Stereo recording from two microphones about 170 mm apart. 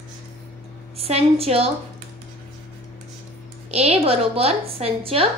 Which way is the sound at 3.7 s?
40° right (ahead or behind).